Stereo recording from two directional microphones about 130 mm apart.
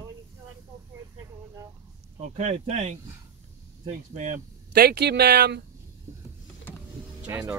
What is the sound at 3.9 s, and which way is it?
Speech, 70° right (ahead or behind).